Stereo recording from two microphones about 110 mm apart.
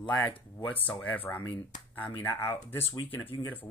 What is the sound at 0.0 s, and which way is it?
Speech, 45° left (ahead or behind).